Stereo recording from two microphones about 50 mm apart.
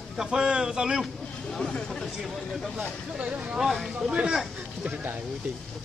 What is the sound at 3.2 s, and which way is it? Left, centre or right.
Speech, right.